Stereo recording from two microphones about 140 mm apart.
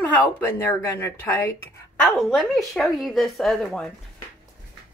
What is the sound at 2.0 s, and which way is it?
A woman's voice, centre (ahead or behind).